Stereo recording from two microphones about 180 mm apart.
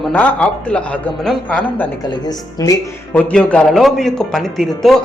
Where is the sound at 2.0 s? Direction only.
20° left (ahead or behind).